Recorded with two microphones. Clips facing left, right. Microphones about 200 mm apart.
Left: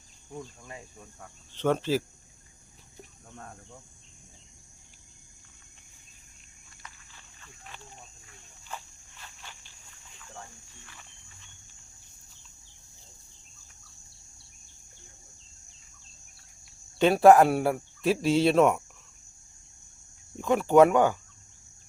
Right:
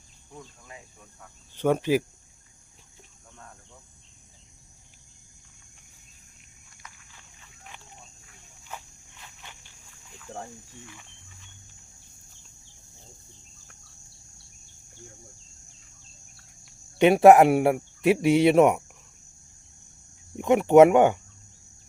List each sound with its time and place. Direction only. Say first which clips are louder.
1.5 s speech: right 3 dB; 10° right (ahead or behind)
8.6 s walk: even; 15° right (ahead or behind)
17.0 s speech: right 3 dB; 20° right (ahead or behind)
20.3 s speech: right 4 dB; 20° right (ahead or behind)